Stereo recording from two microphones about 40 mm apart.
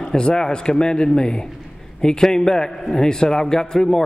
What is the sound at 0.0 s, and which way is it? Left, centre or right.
A man's voice, centre.